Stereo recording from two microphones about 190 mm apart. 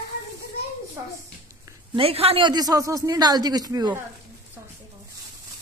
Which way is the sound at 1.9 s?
30° right (ahead or behind).